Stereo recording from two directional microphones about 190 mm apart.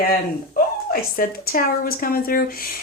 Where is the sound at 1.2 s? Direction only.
50° left (ahead or behind).